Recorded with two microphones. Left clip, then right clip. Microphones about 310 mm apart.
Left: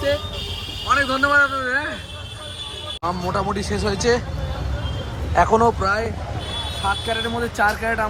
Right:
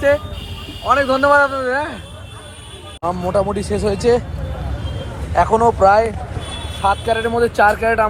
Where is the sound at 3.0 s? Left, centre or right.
Centre.